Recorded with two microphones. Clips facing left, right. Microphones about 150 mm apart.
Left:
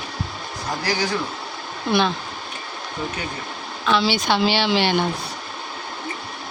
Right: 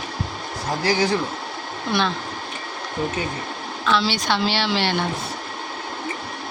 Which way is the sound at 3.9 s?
Centre (ahead or behind).